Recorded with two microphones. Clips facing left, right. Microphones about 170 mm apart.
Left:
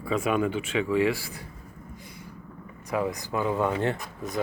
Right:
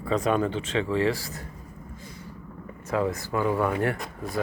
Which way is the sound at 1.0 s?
40° right (ahead or behind).